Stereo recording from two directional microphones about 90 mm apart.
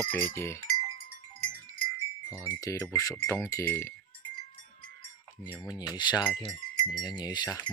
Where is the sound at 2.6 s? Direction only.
40° left (ahead or behind).